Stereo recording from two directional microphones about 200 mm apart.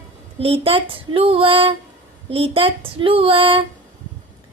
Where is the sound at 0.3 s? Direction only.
30° right (ahead or behind).